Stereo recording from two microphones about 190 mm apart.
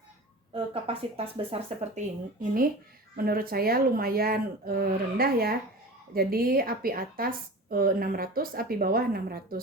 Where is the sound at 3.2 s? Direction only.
50° right (ahead or behind).